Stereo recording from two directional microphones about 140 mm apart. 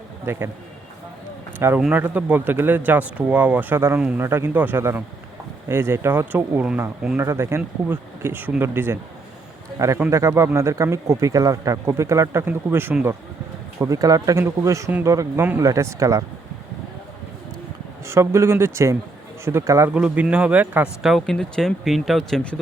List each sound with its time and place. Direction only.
0.3 s speech: 20° right (ahead or behind)
1.5 s speech: 15° right (ahead or behind)
7.2 s a man's voice: 20° right (ahead or behind)
18.0 s speech: 20° right (ahead or behind)
19.9 s a man's voice: 10° right (ahead or behind)